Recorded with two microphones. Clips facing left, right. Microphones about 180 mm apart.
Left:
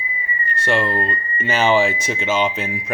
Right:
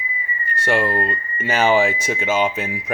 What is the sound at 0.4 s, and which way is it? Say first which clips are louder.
Speech: even; 10° right (ahead or behind).